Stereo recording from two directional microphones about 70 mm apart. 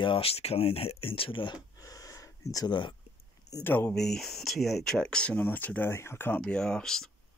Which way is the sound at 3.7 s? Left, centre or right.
Left.